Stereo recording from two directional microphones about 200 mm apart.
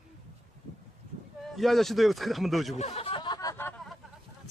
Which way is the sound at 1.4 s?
Centre (ahead or behind).